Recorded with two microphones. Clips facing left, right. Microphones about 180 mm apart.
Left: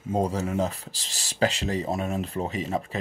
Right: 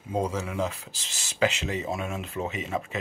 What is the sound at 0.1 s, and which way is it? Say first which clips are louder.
Speech: left 3 dB; 40° left (ahead or behind).